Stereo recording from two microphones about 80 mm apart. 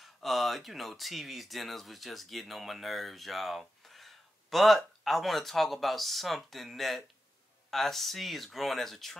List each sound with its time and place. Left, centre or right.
0.0 s speech: centre